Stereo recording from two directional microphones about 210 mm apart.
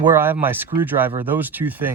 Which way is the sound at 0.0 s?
10° right (ahead or behind).